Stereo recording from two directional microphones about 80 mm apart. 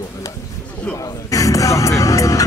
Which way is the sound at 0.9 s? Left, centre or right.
Left.